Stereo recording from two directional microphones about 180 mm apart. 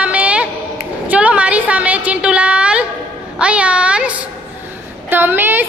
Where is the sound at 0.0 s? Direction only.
5° right (ahead or behind).